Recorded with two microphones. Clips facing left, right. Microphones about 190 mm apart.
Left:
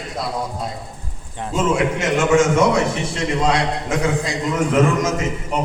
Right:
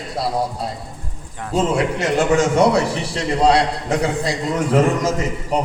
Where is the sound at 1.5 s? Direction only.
35° right (ahead or behind).